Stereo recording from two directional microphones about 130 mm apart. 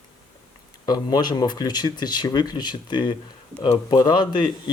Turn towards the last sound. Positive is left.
turn(degrees=35)  # may be behind; listen again after turning